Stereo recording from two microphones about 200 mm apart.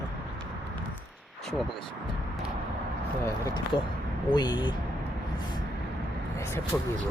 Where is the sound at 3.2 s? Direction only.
15° left (ahead or behind).